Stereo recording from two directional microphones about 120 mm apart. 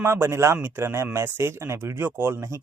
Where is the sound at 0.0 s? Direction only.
20° right (ahead or behind).